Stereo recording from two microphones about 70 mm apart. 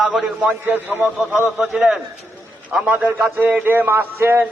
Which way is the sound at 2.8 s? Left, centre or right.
Right.